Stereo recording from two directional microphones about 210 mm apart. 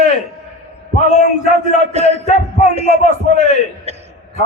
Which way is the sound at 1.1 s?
35° left (ahead or behind).